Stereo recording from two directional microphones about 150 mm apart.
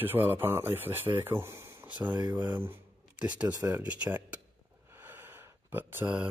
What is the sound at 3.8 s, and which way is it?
Speech, 10° right (ahead or behind).